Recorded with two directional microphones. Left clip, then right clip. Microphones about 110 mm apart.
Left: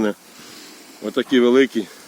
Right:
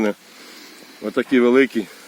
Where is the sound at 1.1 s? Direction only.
90° right.